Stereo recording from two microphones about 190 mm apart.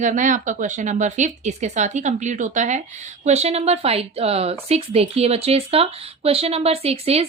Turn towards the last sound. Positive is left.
turn(degrees=-30)  # may be behind; listen again after turning